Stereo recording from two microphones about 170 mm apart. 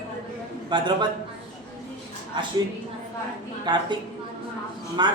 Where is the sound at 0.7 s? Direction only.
25° right (ahead or behind).